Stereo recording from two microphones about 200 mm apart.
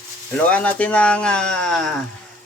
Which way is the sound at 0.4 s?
5° left (ahead or behind).